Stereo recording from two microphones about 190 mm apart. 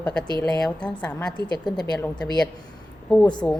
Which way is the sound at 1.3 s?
20° left (ahead or behind).